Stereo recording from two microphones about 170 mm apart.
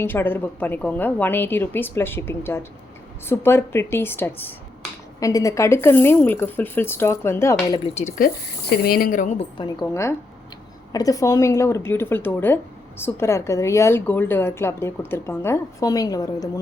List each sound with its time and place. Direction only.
0.0 s a woman's voice: 10° left (ahead or behind)
7.7 s speech: 30° left (ahead or behind)
8.7 s speech: 65° left (ahead or behind)
9.4 s a woman's voice: 30° left (ahead or behind)
9.9 s a woman's voice: 15° left (ahead or behind)